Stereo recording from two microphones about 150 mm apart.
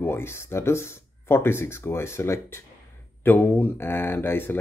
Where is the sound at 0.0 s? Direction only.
15° left (ahead or behind).